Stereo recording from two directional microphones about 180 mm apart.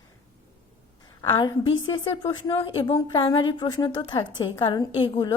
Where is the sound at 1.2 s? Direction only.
25° left (ahead or behind).